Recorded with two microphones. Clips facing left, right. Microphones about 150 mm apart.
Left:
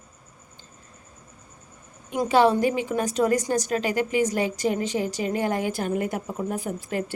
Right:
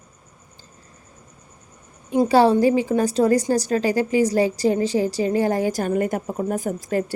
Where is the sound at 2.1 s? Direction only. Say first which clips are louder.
Right 4 dB; 30° right (ahead or behind).